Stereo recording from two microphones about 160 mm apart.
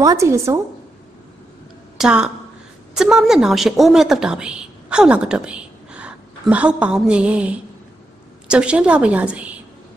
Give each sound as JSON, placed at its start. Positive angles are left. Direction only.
{"t": 0.0, "sound": "a woman's voice", "side_deg": -20}
{"t": 2.0, "sound": "a woman's voice", "side_deg": -5}